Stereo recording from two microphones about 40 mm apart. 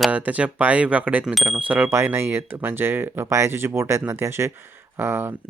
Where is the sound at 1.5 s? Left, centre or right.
Right.